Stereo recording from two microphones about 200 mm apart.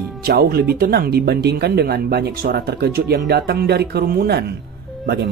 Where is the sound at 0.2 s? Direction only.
50° right (ahead or behind).